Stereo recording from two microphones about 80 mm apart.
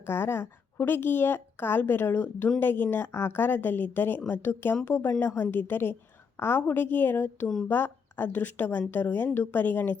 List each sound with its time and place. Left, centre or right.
0.1 s a woman's voice: left
7.4 s speech: centre
7.7 s a woman's voice: left